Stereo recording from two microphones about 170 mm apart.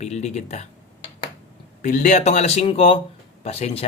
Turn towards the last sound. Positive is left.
turn(degrees=40)  # may be behind; listen again after turning